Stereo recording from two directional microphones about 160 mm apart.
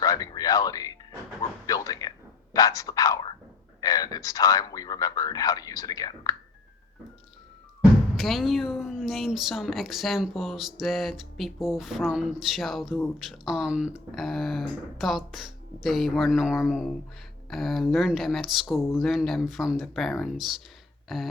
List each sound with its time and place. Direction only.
0.0 s a man's voice: 25° left (ahead or behind)
8.1 s a woman's voice: centre (ahead or behind)